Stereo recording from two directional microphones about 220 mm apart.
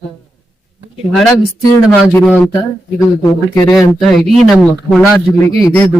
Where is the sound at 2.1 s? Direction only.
10° left (ahead or behind).